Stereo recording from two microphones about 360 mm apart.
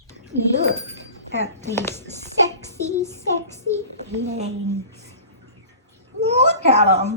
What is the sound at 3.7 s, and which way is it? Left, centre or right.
Speech, right.